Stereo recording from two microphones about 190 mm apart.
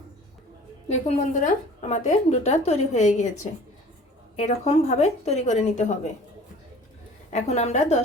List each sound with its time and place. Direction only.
0.9 s a woman's voice: 35° left (ahead or behind)
4.4 s a woman's voice: 35° left (ahead or behind)
7.3 s a woman's voice: 35° left (ahead or behind)